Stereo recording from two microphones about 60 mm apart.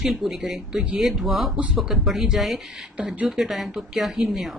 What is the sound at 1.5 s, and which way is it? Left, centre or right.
Speech, right.